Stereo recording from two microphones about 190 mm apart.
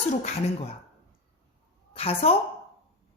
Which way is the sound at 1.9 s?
30° left (ahead or behind).